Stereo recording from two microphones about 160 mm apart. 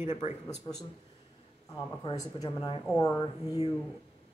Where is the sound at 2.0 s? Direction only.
25° left (ahead or behind).